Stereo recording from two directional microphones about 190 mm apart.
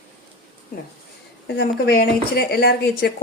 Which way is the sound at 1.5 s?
60° left (ahead or behind).